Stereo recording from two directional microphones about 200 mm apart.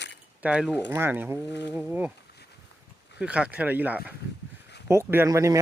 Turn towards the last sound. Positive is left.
turn(degrees=-15)  # may be behind; listen again after turning